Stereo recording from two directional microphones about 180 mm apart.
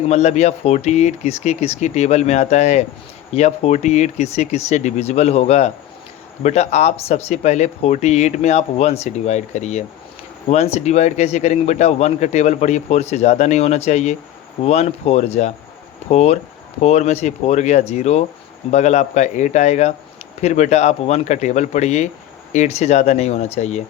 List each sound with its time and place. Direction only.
0.1 s a man's voice: 40° left (ahead or behind)